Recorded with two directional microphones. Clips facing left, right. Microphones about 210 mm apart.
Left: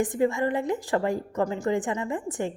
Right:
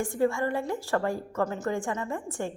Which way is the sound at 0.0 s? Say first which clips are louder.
Left 2 dB; 20° left (ahead or behind).